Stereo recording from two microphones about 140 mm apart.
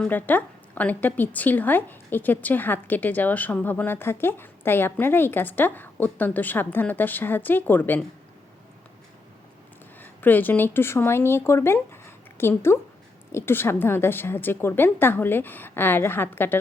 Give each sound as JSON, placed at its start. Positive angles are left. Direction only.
{"t": 0.0, "sound": "a woman's voice", "side_deg": 10}
{"t": 10.0, "sound": "a woman's voice", "side_deg": 15}